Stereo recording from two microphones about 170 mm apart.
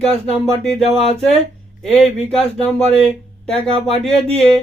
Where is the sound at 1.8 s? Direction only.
5° left (ahead or behind).